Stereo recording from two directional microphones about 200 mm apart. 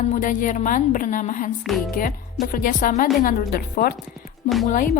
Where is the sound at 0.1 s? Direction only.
40° left (ahead or behind).